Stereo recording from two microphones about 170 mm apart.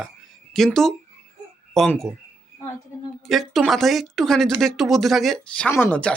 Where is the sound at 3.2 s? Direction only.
Centre (ahead or behind).